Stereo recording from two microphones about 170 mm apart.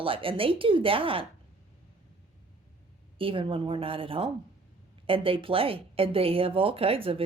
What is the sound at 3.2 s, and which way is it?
Speech, 30° right (ahead or behind).